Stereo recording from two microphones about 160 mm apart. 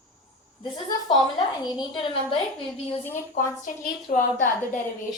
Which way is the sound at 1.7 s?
35° left (ahead or behind).